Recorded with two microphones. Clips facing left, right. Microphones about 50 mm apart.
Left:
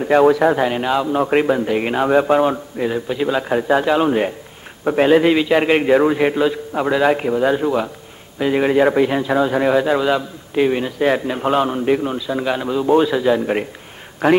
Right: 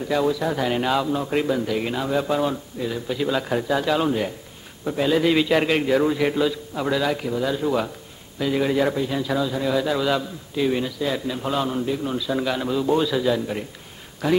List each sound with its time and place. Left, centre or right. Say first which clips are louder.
0.0 s speech: left 9 dB; left
0.7 s a man's voice: left 3 dB; centre
1.1 s a man's voice: left 7 dB; left
3.1 s a man's voice: left 1 dB; left
4.8 s a man's voice: left 7 dB; left
5.3 s a man's voice: left 4 dB; centre
5.7 s a man's voice: left 6 dB; left
6.5 s a man's voice: left 5 dB; left
7.6 s a man's voice: left 4 dB; centre
8.4 s a man's voice: left 6 dB; left
9.5 s speech: left 7 dB; left
9.8 s a man's voice: left 5 dB; left
14.2 s speech: left 7 dB; left